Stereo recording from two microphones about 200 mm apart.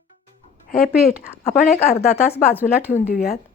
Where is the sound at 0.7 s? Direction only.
50° left (ahead or behind).